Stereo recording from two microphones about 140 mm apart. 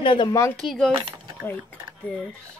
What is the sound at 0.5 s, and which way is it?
Speech, 5° left (ahead or behind).